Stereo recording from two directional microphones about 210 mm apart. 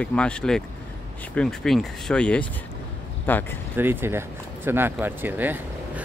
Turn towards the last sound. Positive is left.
turn(degrees=-10)  # may be behind; listen again after turning